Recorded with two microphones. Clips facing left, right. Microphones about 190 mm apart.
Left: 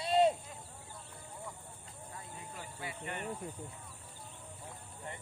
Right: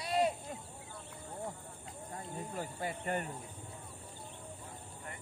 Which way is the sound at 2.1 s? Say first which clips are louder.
Right 7 dB; 40° right (ahead or behind).